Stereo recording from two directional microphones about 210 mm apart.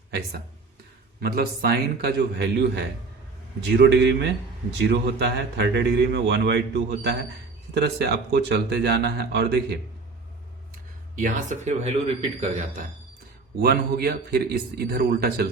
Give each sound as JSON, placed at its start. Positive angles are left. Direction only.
{"t": 1.2, "sound": "a man's voice", "side_deg": -45}
{"t": 11.1, "sound": "speech", "side_deg": -35}
{"t": 13.6, "sound": "a man's voice", "side_deg": -45}